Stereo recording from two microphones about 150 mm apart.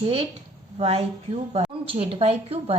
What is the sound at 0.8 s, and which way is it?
A woman's voice, 40° right (ahead or behind).